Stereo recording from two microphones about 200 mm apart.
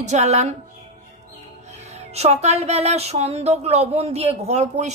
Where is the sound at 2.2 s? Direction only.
30° right (ahead or behind).